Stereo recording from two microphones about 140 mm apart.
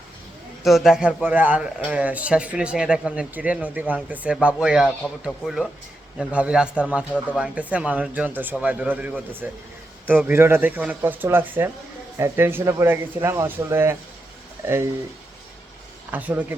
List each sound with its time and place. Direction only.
0.6 s speech: centre (ahead or behind); by 13.9 s 20° right (ahead or behind)
16.1 s speech: 15° right (ahead or behind)